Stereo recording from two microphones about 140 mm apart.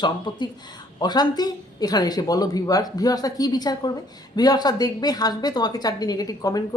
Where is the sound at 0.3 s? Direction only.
30° left (ahead or behind).